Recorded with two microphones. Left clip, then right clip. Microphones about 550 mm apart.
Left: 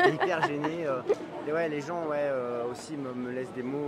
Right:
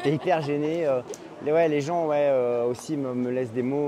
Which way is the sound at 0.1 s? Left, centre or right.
Right.